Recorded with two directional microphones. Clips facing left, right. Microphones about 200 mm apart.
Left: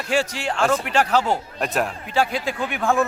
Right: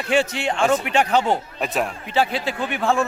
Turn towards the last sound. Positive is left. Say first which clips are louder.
# even
turn(degrees=0)  # may be behind; listen again after turning